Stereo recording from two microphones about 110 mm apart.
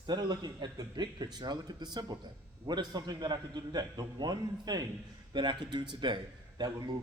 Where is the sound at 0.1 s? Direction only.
40° right (ahead or behind).